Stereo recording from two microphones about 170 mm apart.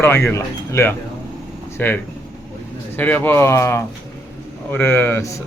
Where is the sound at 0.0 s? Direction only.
15° left (ahead or behind).